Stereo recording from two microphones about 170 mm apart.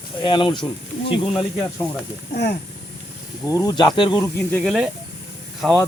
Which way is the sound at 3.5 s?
20° left (ahead or behind).